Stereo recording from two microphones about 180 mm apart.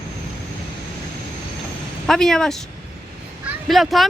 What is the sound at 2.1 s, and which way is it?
Speech, 5° left (ahead or behind).